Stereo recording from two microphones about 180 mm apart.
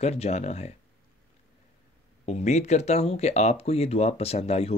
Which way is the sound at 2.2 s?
40° left (ahead or behind).